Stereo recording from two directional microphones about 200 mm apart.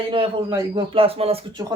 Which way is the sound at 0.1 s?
25° right (ahead or behind).